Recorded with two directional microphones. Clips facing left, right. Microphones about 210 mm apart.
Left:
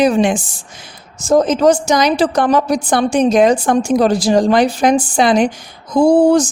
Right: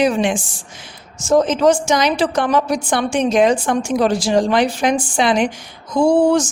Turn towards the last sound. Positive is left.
turn(degrees=35)  # may be behind; listen again after turning